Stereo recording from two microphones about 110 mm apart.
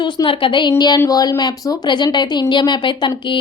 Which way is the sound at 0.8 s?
35° left (ahead or behind).